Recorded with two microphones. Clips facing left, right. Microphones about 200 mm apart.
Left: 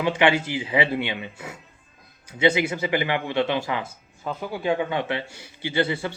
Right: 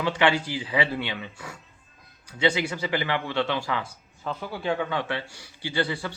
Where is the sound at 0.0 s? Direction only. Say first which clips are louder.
Left 3 dB; 20° left (ahead or behind).